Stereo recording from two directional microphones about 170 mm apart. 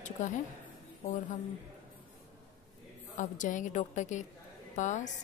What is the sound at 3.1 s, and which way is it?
A woman's voice, 50° left (ahead or behind).